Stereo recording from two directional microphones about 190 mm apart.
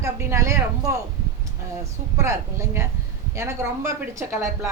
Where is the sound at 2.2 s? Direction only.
15° right (ahead or behind).